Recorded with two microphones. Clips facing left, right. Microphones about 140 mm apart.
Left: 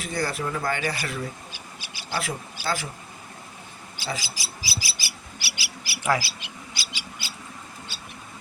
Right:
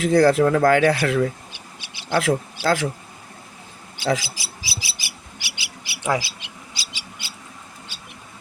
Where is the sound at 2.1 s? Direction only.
60° right (ahead or behind).